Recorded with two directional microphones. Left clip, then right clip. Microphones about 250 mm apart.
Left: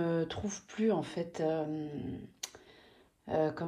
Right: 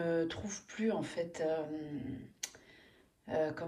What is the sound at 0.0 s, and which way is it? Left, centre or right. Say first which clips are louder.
Speech: left 1 dB; centre.